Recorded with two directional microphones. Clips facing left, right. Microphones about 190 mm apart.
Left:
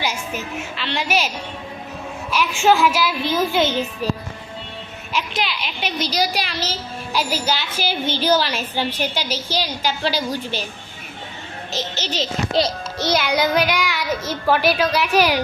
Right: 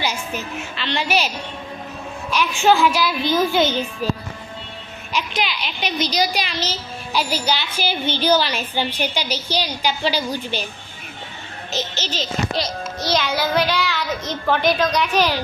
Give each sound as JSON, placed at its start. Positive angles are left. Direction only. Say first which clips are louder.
{"t": 0.0, "sound": "a child's voice", "louder": "even", "side_deg": 5}
{"t": 2.3, "sound": "a woman's voice", "louder": "even", "side_deg": 5}
{"t": 5.1, "sound": "a child's voice", "louder": "even", "side_deg": 0}
{"t": 12.2, "sound": "a child's voice", "louder": "left 4 dB", "side_deg": 25}
{"t": 13.1, "sound": "a child's voice", "louder": "left 1 dB", "side_deg": 15}